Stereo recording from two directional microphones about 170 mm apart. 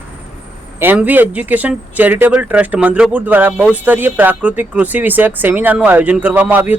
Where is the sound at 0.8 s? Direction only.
10° right (ahead or behind).